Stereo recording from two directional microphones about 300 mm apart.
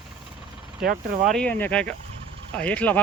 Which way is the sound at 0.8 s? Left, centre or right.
Right.